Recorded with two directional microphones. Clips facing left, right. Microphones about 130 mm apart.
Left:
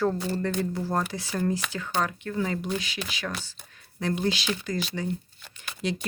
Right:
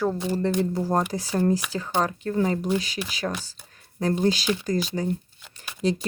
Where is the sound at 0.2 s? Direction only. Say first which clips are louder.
Right 4 dB; 20° right (ahead or behind).